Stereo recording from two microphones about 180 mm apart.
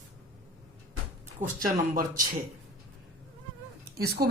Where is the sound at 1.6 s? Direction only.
50° right (ahead or behind).